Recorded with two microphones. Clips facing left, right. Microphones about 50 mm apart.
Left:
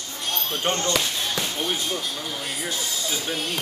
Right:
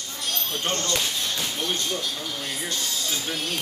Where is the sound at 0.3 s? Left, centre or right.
Left.